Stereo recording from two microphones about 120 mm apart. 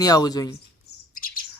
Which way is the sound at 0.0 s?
30° left (ahead or behind).